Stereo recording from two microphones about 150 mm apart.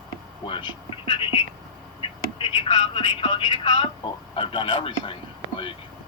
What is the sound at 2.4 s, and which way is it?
Speech, 35° left (ahead or behind).